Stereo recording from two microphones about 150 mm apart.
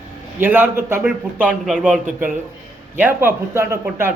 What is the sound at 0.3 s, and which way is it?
Speech, 15° right (ahead or behind).